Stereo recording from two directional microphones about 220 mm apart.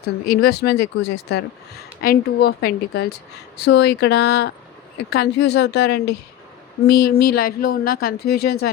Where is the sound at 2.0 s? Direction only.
45° left (ahead or behind).